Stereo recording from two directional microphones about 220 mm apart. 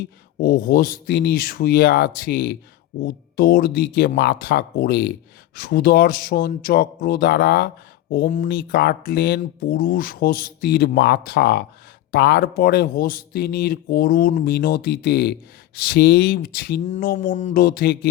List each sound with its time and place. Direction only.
0.3 s speech: 45° left (ahead or behind)
16.8 s mantra: 35° left (ahead or behind)